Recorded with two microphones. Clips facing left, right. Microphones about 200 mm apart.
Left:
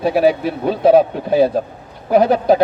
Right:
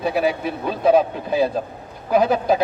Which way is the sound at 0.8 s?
50° left (ahead or behind).